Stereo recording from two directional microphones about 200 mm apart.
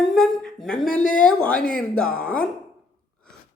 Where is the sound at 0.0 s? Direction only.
Centre (ahead or behind).